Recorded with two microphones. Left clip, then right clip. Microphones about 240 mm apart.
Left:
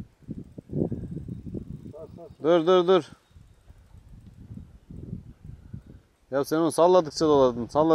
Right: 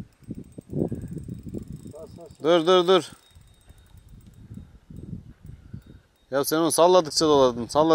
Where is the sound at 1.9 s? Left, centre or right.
Left.